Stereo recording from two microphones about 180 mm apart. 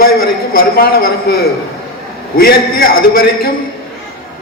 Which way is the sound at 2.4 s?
55° left (ahead or behind).